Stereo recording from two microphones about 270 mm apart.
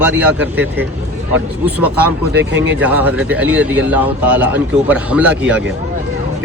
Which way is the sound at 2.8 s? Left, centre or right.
Centre.